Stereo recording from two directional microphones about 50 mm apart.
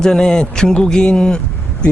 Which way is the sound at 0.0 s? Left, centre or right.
Centre.